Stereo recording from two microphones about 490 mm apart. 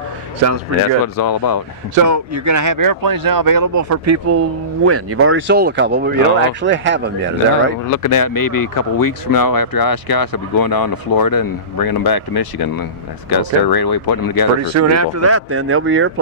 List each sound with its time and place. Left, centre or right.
1.0 s speech: left
2.0 s speech: right
7.9 s speech: left
14.6 s speech: right